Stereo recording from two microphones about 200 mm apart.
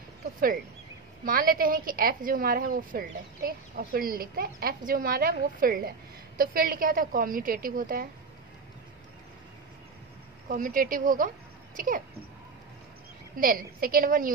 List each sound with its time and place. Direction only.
1.2 s a woman's voice: 45° right (ahead or behind)
10.5 s a woman's voice: 45° right (ahead or behind)
13.4 s a woman's voice: 45° right (ahead or behind)